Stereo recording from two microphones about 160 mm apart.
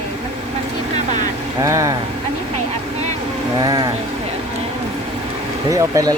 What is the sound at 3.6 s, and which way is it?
Speech, 25° right (ahead or behind).